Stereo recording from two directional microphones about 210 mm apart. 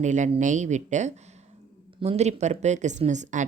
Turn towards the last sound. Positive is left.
turn(degrees=-35)  # may be behind; listen again after turning